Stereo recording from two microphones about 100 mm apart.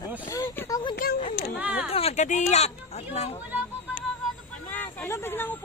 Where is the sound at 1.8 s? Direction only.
90° left.